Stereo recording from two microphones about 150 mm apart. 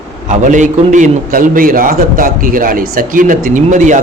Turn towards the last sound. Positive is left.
turn(degrees=-55)  # may be behind; listen again after turning